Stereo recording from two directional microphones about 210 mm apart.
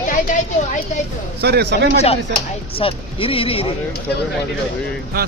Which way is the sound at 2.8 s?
25° left (ahead or behind).